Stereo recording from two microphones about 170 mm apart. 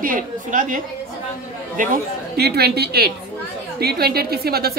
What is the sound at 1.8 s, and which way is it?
A woman's voice, 65° right (ahead or behind).